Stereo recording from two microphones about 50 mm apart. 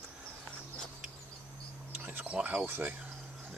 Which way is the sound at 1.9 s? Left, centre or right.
Right.